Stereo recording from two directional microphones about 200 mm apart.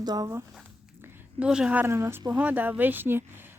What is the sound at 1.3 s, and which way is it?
A woman's voice, 5° right (ahead or behind).